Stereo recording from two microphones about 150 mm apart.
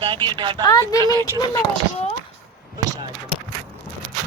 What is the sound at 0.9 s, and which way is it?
Speech, 25° right (ahead or behind).